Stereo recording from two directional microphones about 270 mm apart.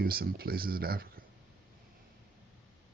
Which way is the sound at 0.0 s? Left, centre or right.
Right.